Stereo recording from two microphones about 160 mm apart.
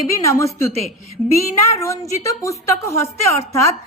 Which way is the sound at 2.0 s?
20° left (ahead or behind).